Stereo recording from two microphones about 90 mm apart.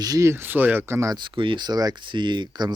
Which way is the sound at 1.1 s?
65° right (ahead or behind).